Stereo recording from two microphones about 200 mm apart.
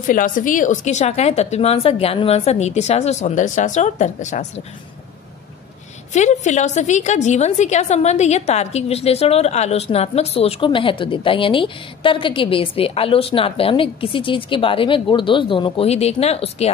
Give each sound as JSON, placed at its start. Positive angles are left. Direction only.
{"t": 0.0, "sound": "a woman's voice", "side_deg": 40}
{"t": 6.1, "sound": "a woman's voice", "side_deg": 35}